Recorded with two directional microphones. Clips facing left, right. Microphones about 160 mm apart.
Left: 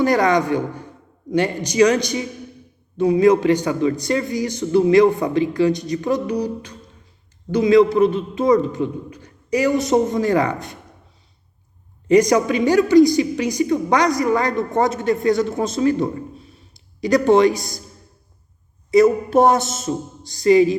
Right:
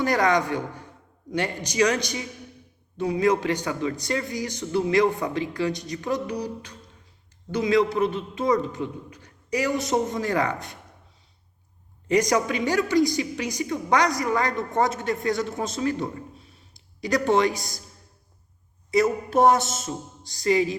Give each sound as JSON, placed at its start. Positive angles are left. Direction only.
{"t": 0.0, "sound": "a man's voice", "side_deg": 20}
{"t": 12.0, "sound": "a man's voice", "side_deg": 20}
{"t": 17.0, "sound": "a man's voice", "side_deg": 20}
{"t": 19.3, "sound": "a man's voice", "side_deg": 25}